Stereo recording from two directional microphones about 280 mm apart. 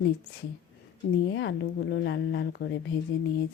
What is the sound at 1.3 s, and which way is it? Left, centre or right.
Speech, left.